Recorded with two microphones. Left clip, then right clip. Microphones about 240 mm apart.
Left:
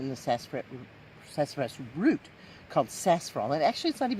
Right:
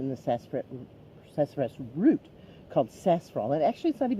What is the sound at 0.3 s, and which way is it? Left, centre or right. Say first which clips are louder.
Speech: even; left.